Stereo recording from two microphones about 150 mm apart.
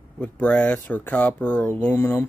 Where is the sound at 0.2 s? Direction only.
10° left (ahead or behind).